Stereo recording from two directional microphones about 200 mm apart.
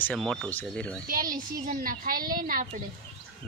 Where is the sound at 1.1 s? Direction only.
45° right (ahead or behind).